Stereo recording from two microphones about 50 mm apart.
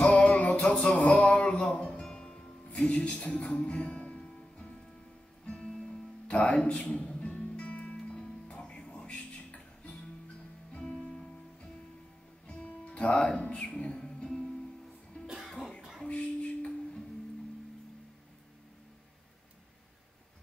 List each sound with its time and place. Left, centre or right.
0.0 s music: left
1.3 s a sound: left
2.0 s music: centre
2.9 s speech: left
3.5 s music: centre
12.4 s music: left
15.2 s music: centre
15.5 s throat clearing: centre
16.1 s a sound: left